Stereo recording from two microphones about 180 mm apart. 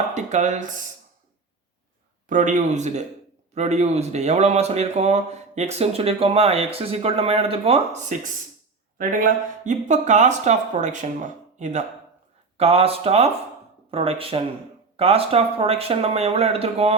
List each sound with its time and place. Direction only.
0.1 s speech: 40° right (ahead or behind)
2.3 s speech: 45° right (ahead or behind)